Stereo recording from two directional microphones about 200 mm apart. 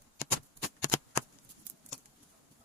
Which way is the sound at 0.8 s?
15° left (ahead or behind).